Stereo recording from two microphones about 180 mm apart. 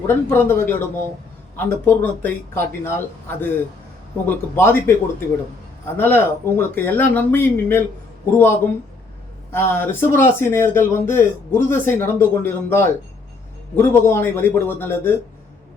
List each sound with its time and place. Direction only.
0.1 s speech: 15° left (ahead or behind)
6.0 s speech: 10° left (ahead or behind)